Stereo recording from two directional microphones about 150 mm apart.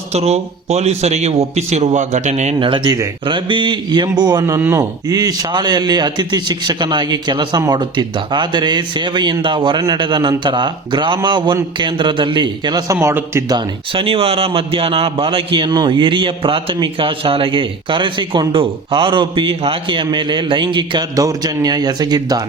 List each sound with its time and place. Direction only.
0.1 s a man's voice: 45° right (ahead or behind); by 13.6 s 20° right (ahead or behind)
13.6 s a man's voice: 35° right (ahead or behind)